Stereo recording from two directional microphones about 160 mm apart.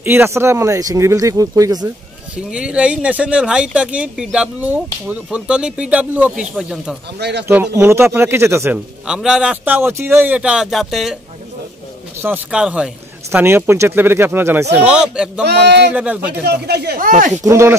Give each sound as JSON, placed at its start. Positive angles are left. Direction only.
{"t": 0.0, "sound": "speech", "side_deg": -15}
{"t": 2.5, "sound": "speech", "side_deg": -5}
{"t": 7.2, "sound": "speech", "side_deg": -90}
{"t": 7.4, "sound": "speech", "side_deg": -15}
{"t": 8.7, "sound": "a man's voice", "side_deg": -5}
{"t": 12.2, "sound": "a man's voice", "side_deg": -10}
{"t": 15.4, "sound": "speech", "side_deg": -90}
{"t": 15.9, "sound": "speech", "side_deg": -10}
{"t": 16.4, "sound": "speech", "side_deg": -90}
{"t": 17.5, "sound": "speech", "side_deg": -15}